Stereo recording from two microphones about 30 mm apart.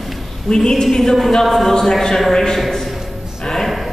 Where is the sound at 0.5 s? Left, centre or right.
Left.